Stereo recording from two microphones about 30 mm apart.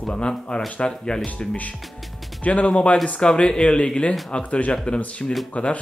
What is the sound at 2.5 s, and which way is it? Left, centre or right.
Speech, left.